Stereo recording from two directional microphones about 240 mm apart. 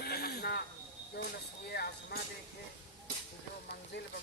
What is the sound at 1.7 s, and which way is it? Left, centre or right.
Speech, left.